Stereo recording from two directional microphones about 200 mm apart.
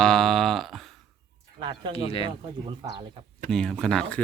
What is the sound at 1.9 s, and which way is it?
Speech, 30° left (ahead or behind).